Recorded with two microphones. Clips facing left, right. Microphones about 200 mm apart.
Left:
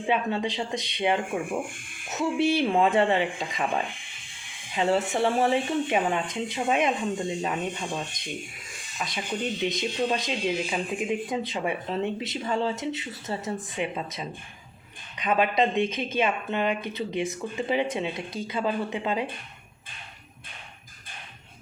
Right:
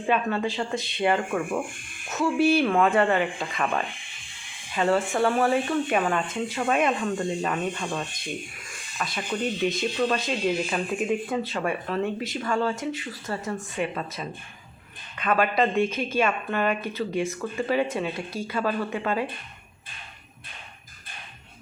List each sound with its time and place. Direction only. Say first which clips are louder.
0.0 s a woman's voice: right 1 dB; 20° left (ahead or behind)